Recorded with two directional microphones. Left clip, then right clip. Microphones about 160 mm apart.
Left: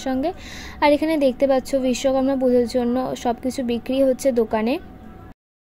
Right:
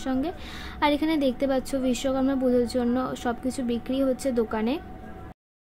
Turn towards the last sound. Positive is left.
turn(degrees=25)  # may be behind; listen again after turning